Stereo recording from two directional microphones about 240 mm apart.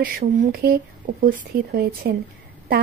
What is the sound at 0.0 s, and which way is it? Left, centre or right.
Speech, right.